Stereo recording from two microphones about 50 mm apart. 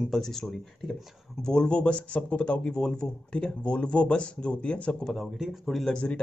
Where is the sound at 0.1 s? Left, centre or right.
Centre; by 2.6 s left.